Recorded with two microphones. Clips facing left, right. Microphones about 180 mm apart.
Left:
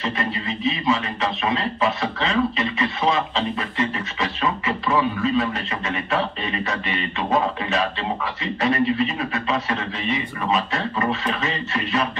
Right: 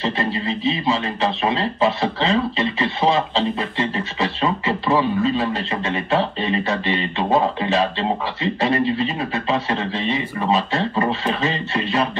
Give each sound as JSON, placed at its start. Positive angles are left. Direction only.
{"t": 0.0, "sound": "music", "side_deg": -30}